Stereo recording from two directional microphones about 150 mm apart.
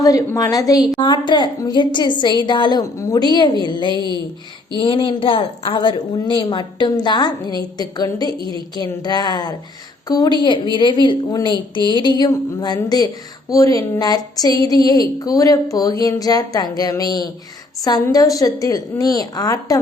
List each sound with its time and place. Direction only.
0.0 s a woman's voice: 25° left (ahead or behind)
8.4 s a woman's voice: 30° right (ahead or behind)
8.7 s a woman's voice: 25° left (ahead or behind)